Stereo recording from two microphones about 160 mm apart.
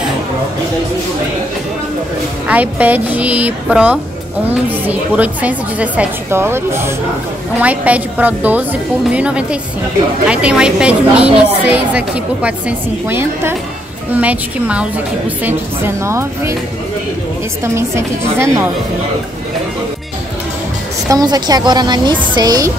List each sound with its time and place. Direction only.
2.4 s a woman's voice: 10° right (ahead or behind)
17.7 s a woman's voice: 15° right (ahead or behind)
21.1 s a woman's voice: 25° right (ahead or behind)